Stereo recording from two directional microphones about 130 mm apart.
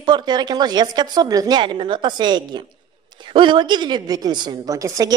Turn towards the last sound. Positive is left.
turn(degrees=-25)  # may be behind; listen again after turning